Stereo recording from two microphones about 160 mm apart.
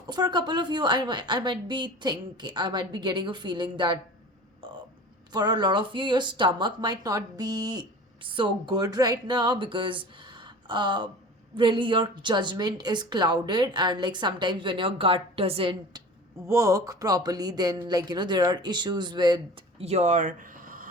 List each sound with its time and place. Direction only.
0.1 s speech: 25° right (ahead or behind)
5.3 s speech: 25° right (ahead or behind)
16.5 s speech: 20° right (ahead or behind)
19.8 s speech: 45° right (ahead or behind); by 20.8 s 60° right (ahead or behind)